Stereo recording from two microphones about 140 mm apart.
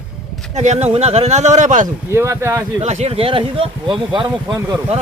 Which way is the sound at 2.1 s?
20° right (ahead or behind).